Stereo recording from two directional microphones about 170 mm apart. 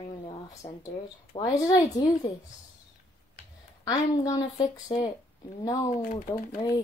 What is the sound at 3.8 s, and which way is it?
A child's voice, 20° left (ahead or behind).